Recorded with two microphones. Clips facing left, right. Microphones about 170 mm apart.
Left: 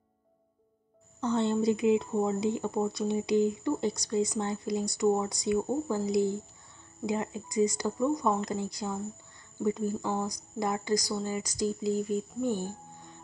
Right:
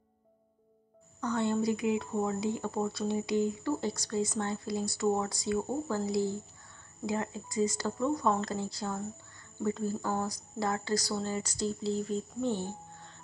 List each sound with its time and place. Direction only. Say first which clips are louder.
1.2 s speech: left 3 dB; 25° left (ahead or behind)